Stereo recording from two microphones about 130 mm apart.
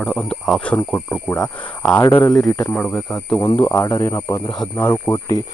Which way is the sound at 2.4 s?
20° left (ahead or behind).